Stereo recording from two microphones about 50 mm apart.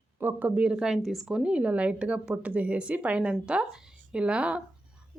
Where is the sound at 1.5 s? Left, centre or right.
Right.